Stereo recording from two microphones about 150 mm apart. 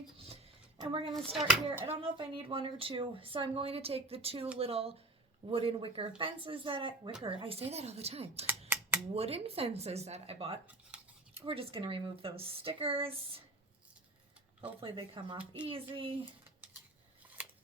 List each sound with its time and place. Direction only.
0.8 s speech: 35° right (ahead or behind)
1.1 s speech: centre (ahead or behind)
2.0 s speech: 35° right (ahead or behind)
14.8 s speech: 35° right (ahead or behind)